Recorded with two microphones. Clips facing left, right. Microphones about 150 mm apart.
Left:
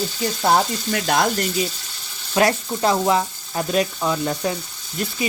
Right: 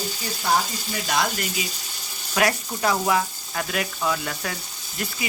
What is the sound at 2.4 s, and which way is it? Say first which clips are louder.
Speech: left 4 dB; 25° left (ahead or behind).